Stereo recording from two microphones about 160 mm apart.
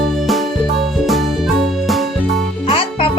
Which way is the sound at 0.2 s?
Centre (ahead or behind).